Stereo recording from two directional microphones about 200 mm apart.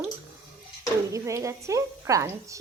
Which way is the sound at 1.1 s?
15° right (ahead or behind).